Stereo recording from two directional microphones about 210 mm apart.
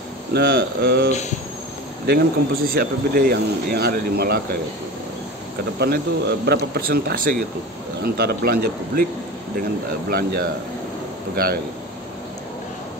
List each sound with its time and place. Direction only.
0.3 s speech: 50° right (ahead or behind)
5.8 s speech: 50° right (ahead or behind)